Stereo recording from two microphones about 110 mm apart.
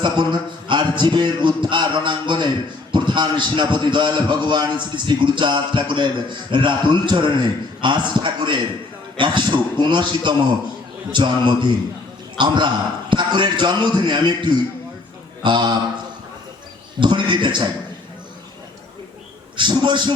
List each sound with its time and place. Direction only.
0.0 s a man's voice: 45° right (ahead or behind)
17.0 s a man's voice: 45° right (ahead or behind)
19.5 s a man's voice: 45° right (ahead or behind)